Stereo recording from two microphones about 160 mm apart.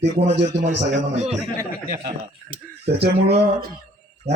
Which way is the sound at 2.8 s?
90° right.